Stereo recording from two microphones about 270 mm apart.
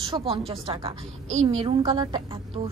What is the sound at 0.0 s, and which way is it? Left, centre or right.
A woman's voice, centre.